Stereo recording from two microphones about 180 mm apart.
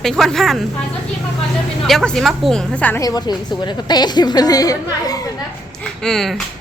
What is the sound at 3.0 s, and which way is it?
A woman's voice, 20° left (ahead or behind).